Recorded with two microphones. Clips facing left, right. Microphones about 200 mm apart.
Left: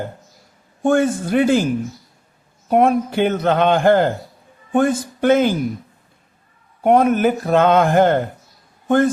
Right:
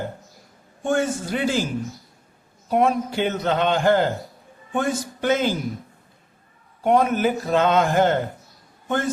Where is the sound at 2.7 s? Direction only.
55° left (ahead or behind).